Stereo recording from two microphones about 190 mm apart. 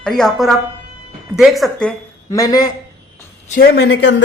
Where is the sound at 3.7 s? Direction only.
65° left (ahead or behind).